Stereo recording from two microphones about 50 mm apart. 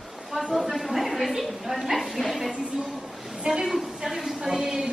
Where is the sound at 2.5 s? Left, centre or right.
Centre.